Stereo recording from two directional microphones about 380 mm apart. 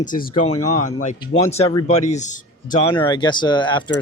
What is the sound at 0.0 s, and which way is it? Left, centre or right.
Speech, centre.